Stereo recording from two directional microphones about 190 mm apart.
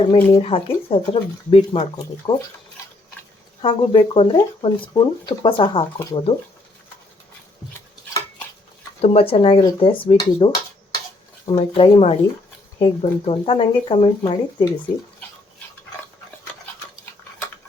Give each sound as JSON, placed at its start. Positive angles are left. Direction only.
{"t": 0.0, "sound": "speech", "side_deg": 30}
{"t": 3.6, "sound": "speech", "side_deg": 25}
{"t": 9.0, "sound": "speech", "side_deg": 30}
{"t": 11.5, "sound": "speech", "side_deg": 30}